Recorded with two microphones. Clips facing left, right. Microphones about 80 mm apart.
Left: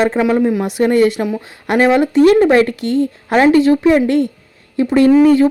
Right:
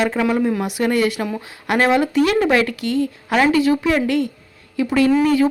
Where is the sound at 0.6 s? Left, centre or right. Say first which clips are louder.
Left 6 dB; left.